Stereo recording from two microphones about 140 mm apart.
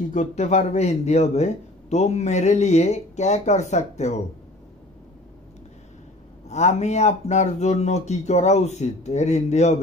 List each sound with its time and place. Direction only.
0.1 s a man's voice: 55° left (ahead or behind)
6.5 s speech: 55° left (ahead or behind)